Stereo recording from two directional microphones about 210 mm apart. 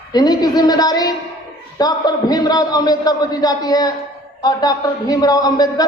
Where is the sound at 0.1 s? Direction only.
20° left (ahead or behind).